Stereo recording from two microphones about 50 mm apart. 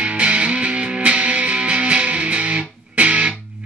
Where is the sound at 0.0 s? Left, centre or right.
Right.